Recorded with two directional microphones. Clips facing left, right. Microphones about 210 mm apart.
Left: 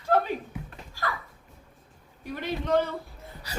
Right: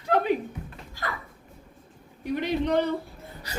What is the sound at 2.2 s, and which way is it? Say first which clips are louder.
Speech: right 6 dB; 15° right (ahead or behind).